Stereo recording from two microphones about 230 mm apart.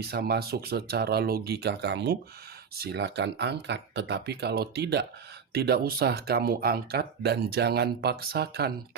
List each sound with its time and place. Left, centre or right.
0.0 s speech: right